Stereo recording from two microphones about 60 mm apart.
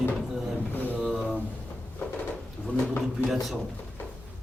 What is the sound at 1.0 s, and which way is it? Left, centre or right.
Speech, centre.